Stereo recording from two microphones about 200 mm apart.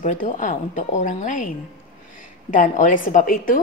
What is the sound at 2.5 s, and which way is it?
A woman's voice, 40° left (ahead or behind).